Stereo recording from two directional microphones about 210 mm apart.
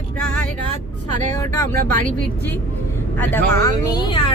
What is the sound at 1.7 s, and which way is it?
Speech, 40° right (ahead or behind).